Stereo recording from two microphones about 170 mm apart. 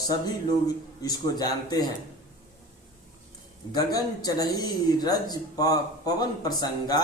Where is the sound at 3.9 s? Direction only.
20° left (ahead or behind).